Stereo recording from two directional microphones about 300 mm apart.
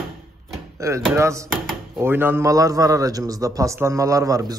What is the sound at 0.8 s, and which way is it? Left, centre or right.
Speech, centre.